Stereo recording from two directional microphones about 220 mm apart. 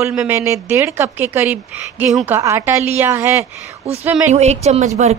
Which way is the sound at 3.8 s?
30° right (ahead or behind).